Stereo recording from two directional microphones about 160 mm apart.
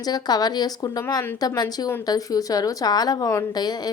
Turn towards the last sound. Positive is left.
turn(degrees=25)  # may be behind; listen again after turning